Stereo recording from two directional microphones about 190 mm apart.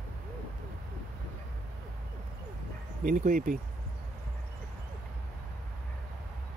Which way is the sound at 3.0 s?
45° right (ahead or behind).